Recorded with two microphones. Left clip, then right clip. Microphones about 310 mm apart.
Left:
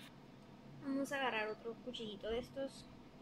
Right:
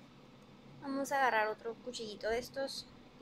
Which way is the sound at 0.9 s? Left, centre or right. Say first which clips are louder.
Right 8 dB; right.